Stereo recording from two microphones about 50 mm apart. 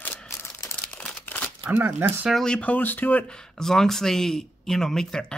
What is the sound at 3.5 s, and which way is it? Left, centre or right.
Speech, centre.